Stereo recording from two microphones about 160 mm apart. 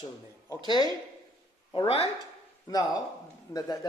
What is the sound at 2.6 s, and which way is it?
Speech, 25° left (ahead or behind).